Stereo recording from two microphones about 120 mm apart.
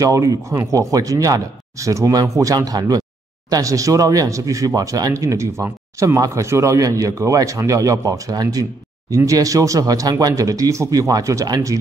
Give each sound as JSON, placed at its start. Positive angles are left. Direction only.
{"t": 0.0, "sound": "speech", "side_deg": -25}